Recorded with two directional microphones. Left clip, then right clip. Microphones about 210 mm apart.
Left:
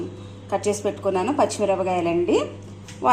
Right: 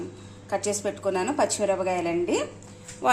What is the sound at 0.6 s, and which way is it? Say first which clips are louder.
A woman's voice: left 5 dB; 20° right (ahead or behind).